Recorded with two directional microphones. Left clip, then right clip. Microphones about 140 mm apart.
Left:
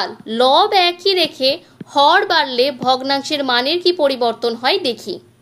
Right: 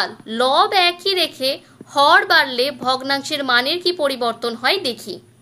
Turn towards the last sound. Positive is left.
turn(degrees=25)  # may be behind; listen again after turning